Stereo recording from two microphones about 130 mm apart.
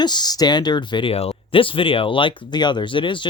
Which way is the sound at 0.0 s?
35° left (ahead or behind).